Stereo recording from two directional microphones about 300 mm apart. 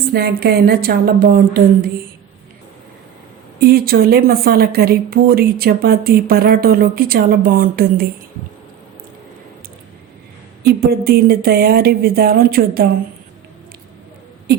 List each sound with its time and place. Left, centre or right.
0.1 s a sound: right
3.6 s speech: right
10.6 s speech: right